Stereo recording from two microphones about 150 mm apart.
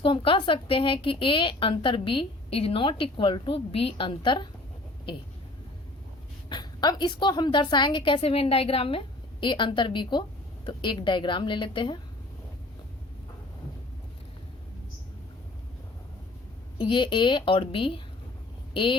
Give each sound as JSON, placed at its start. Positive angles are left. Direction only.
{"t": 0.0, "sound": "a woman's voice", "side_deg": 35}
{"t": 6.5, "sound": "a woman's voice", "side_deg": 30}
{"t": 16.7, "sound": "a woman's voice", "side_deg": 30}